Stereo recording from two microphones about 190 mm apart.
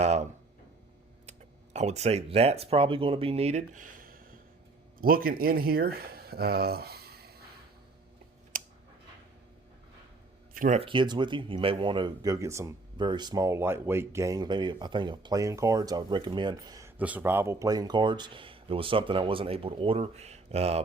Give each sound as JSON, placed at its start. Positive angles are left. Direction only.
{"t": 0.0, "sound": "a sound", "side_deg": -35}
{"t": 1.3, "sound": "speech", "side_deg": -35}
{"t": 8.5, "sound": "a sound", "side_deg": -45}
{"t": 10.5, "sound": "speech", "side_deg": -45}
{"t": 10.8, "sound": "speech", "side_deg": -25}
{"t": 17.0, "sound": "speech", "side_deg": -10}